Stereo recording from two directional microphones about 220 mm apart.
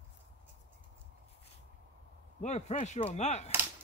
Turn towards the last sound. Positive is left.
turn(degrees=30)  # may be behind; listen again after turning